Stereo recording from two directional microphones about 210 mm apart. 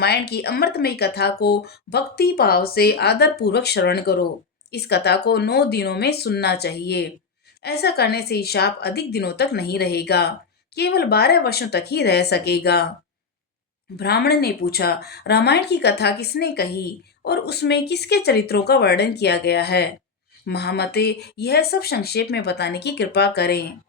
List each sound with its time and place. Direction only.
0.0 s speech: 50° left (ahead or behind)
13.9 s speech: 50° left (ahead or behind)